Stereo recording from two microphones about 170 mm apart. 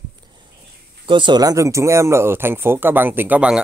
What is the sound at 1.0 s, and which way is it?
Speech, 30° right (ahead or behind).